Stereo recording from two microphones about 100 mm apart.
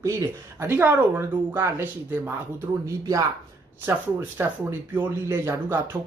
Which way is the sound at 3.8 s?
20° right (ahead or behind).